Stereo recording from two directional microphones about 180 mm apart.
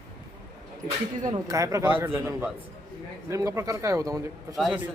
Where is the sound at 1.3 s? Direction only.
20° right (ahead or behind).